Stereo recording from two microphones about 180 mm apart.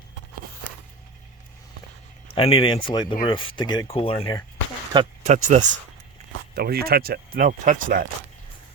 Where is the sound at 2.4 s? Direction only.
30° left (ahead or behind).